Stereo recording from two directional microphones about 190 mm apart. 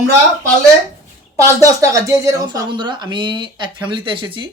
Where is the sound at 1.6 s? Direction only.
15° right (ahead or behind).